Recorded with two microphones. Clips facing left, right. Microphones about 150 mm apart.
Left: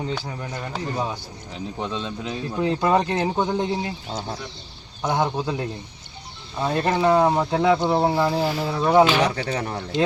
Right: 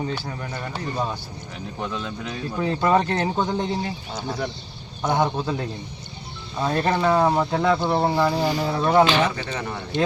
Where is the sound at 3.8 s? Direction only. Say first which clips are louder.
Even; 25° left (ahead or behind).